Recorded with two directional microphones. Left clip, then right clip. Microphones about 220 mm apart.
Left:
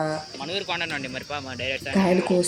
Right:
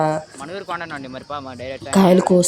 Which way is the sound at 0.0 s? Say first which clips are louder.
Right 7 dB; 35° right (ahead or behind).